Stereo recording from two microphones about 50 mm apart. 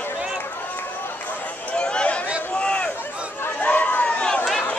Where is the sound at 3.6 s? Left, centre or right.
Left.